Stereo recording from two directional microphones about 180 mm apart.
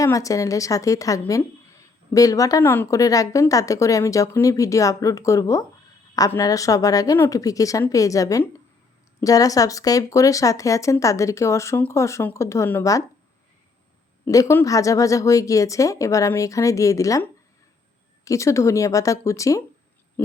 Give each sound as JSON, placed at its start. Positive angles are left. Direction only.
{"t": 0.0, "sound": "speech", "side_deg": 20}
{"t": 14.3, "sound": "speech", "side_deg": 20}
{"t": 18.3, "sound": "speech", "side_deg": 15}
{"t": 20.2, "sound": "owl", "side_deg": 10}